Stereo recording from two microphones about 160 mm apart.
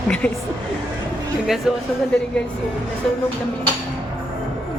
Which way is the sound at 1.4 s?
Centre (ahead or behind).